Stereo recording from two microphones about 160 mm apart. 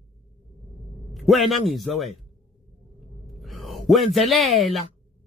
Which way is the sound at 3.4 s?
Centre (ahead or behind).